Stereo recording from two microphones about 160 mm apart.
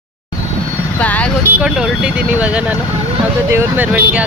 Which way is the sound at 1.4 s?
5° right (ahead or behind).